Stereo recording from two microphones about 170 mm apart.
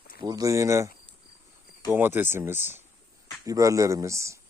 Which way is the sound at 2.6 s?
45° left (ahead or behind).